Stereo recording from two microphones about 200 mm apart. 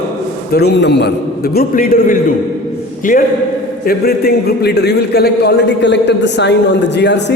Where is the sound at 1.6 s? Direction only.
45° left (ahead or behind).